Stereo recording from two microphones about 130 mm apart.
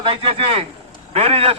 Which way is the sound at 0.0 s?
45° right (ahead or behind).